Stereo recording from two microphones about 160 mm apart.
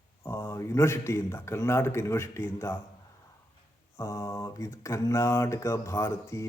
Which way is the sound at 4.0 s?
20° left (ahead or behind).